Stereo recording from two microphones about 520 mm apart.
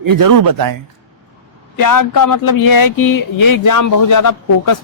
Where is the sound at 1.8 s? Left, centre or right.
Left.